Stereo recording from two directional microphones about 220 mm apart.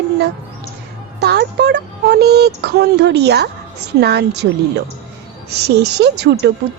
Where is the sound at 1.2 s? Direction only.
50° right (ahead or behind).